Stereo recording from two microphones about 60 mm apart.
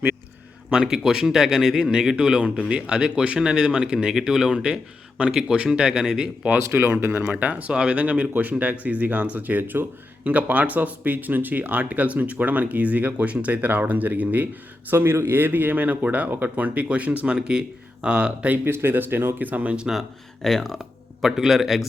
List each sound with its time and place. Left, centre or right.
0.7 s speech: centre
6.7 s speech: right
14.8 s speech: right; by 18.5 s centre
18.5 s speech: right
19.9 s speech: centre